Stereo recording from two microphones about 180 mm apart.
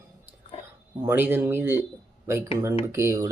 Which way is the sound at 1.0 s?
10° right (ahead or behind).